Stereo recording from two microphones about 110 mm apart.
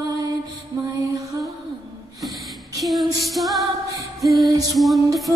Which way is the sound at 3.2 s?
Centre (ahead or behind).